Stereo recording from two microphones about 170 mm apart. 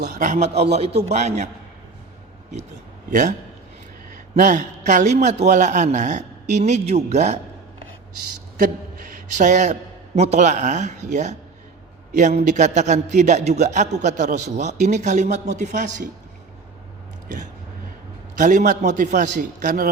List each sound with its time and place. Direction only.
0.2 s a man's voice: 45° right (ahead or behind)
3.1 s a man's voice: 50° right (ahead or behind)
4.4 s a man's voice: 50° right (ahead or behind)
9.3 s a man's voice: 45° right (ahead or behind)
18.3 s a man's voice: 50° right (ahead or behind)